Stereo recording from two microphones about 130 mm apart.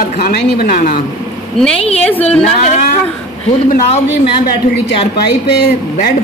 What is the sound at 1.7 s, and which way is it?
A woman's voice, 50° left (ahead or behind).